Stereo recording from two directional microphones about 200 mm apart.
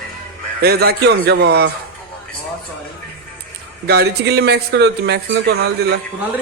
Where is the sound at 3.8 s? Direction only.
55° right (ahead or behind).